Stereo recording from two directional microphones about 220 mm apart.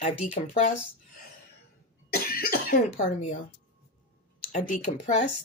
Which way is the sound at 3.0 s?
35° left (ahead or behind).